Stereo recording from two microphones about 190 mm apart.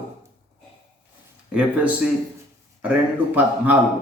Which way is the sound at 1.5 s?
5° right (ahead or behind).